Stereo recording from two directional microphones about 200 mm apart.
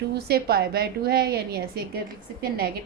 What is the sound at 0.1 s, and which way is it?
A woman's voice, 55° right (ahead or behind).